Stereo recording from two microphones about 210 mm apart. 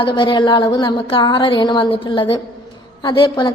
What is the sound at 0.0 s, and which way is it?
A woman's voice, 25° left (ahead or behind).